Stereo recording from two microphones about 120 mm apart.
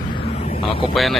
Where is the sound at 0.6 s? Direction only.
50° left (ahead or behind).